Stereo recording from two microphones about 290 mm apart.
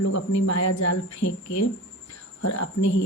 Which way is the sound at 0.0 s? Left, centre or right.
Left.